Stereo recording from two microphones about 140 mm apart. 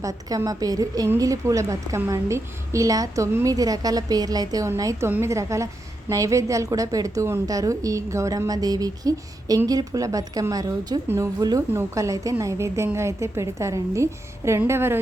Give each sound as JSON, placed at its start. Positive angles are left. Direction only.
{"t": 0.0, "sound": "a woman's voice", "side_deg": -25}